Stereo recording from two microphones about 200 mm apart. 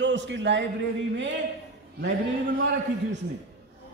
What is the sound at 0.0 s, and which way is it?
Speech, 65° right (ahead or behind).